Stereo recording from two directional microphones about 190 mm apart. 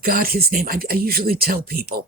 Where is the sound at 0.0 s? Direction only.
50° right (ahead or behind).